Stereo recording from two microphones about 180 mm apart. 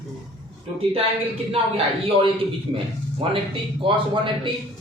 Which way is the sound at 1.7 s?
30° right (ahead or behind).